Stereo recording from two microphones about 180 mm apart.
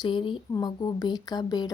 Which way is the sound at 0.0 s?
25° left (ahead or behind).